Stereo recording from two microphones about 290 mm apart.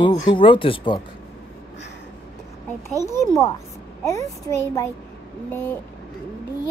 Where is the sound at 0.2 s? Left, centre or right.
Centre.